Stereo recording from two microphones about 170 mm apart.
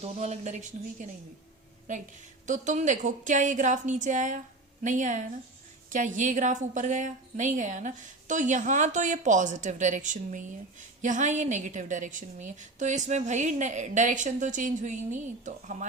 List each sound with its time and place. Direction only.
0.0 s a woman's voice: 40° right (ahead or behind)